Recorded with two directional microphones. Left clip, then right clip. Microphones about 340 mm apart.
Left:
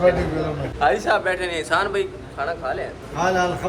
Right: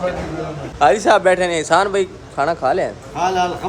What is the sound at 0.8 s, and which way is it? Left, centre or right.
A man's voice, centre.